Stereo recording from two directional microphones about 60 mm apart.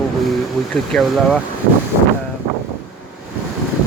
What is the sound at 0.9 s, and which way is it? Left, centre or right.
Speech, centre.